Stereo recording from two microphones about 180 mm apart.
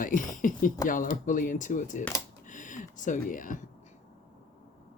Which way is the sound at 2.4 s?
45° left (ahead or behind).